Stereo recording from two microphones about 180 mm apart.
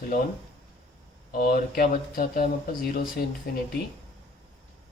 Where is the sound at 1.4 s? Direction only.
55° left (ahead or behind).